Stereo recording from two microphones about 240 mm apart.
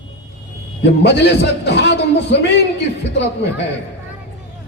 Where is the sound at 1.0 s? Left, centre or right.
Left.